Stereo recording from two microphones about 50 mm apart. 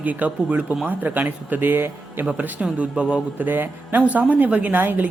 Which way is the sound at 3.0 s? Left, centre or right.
Right.